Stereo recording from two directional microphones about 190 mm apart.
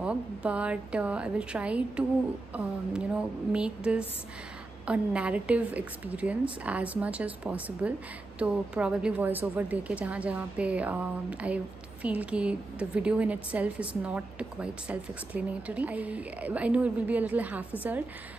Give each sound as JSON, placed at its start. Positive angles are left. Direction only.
{"t": 0.0, "sound": "a woman's voice", "side_deg": -5}